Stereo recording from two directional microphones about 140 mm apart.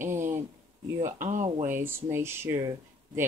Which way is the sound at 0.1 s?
65° right (ahead or behind).